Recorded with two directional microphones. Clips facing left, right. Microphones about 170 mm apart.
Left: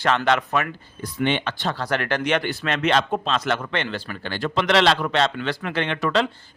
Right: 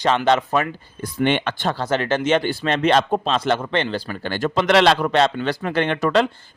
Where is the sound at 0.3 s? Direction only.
30° right (ahead or behind).